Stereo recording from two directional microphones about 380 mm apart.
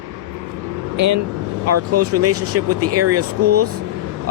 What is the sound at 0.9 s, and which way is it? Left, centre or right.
Speech, right.